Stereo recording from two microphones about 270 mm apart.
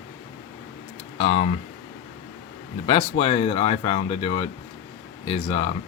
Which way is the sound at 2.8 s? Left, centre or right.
Left.